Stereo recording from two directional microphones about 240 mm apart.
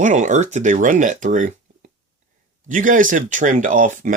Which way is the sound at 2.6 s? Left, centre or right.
Right.